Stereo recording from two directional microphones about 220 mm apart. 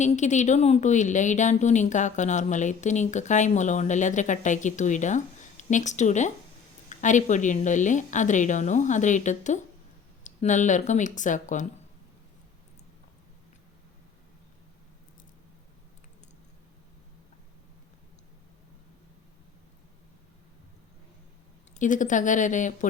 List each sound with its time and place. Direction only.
0.0 s speech: 35° left (ahead or behind)
21.8 s speech: 35° left (ahead or behind)